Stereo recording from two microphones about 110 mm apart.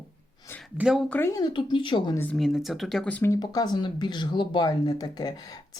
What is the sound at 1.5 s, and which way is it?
Speech, 45° left (ahead or behind).